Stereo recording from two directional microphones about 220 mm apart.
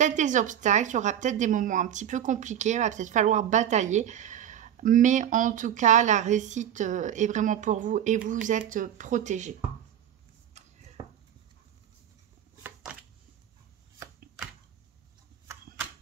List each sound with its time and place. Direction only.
0.0 s a woman's voice: 35° right (ahead or behind)